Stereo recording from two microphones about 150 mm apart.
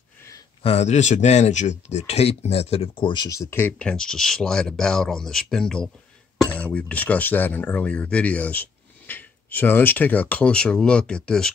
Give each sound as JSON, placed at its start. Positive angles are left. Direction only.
{"t": 0.6, "sound": "speech", "side_deg": 45}